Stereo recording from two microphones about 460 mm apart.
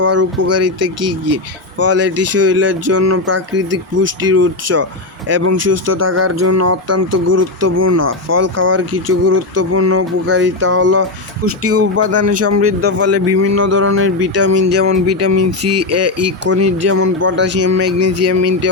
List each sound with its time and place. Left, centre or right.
0.0 s speech: right